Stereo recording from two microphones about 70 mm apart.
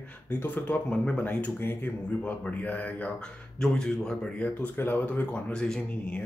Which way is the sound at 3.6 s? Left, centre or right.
Centre.